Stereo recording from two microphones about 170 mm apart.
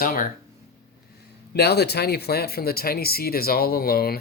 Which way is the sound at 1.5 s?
70° left (ahead or behind).